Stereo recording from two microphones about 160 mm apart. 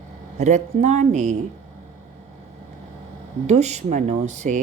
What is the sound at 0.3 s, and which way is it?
Speech, 45° right (ahead or behind).